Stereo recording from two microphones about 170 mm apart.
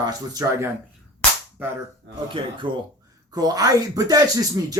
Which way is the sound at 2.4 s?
30° right (ahead or behind).